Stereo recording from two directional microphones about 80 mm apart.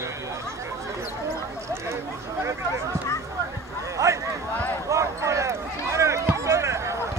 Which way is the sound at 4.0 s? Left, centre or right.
Right.